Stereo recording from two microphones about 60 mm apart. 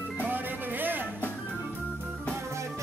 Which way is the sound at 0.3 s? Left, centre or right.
Right.